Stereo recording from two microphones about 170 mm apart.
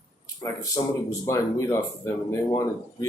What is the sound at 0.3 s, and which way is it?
Speech, 20° left (ahead or behind).